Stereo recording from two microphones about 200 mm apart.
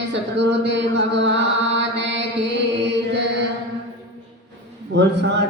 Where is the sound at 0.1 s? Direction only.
60° right (ahead or behind).